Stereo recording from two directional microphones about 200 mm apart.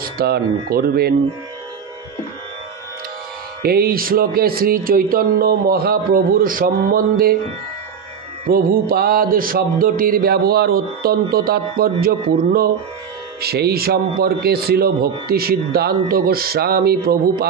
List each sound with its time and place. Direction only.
0.0 s music: 50° right (ahead or behind)
3.6 s music: 50° right (ahead or behind)
8.5 s music: 45° right (ahead or behind)